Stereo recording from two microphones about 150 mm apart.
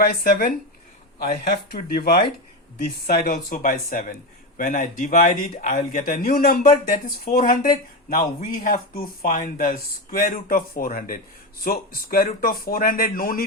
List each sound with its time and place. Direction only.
0.0 s speech: 80° left
1.2 s speech: 90° left
3.2 s speech: 65° left (ahead or behind); by 12.3 s 90° left
12.4 s speech: 75° left (ahead or behind)